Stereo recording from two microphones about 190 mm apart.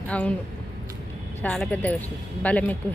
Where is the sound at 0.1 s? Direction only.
5° left (ahead or behind).